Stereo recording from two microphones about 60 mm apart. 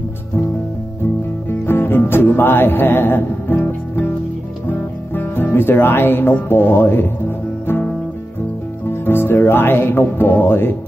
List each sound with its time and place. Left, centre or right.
1.7 s music: left
9.0 s music: left